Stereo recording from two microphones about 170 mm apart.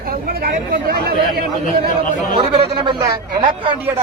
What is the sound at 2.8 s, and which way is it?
Speech, 25° right (ahead or behind).